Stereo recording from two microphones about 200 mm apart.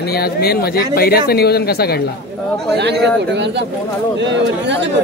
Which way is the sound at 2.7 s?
55° right (ahead or behind).